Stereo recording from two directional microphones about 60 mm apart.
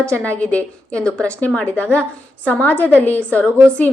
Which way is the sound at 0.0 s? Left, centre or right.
Left.